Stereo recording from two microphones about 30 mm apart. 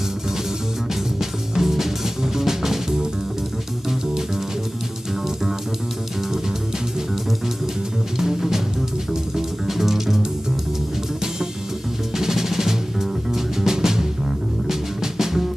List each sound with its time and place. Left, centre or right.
1.2 s music: centre
8.2 s music: centre
9.7 s music: centre
12.2 s music: centre